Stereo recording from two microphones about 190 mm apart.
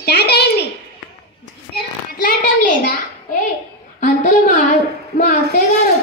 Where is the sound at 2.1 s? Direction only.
45° left (ahead or behind).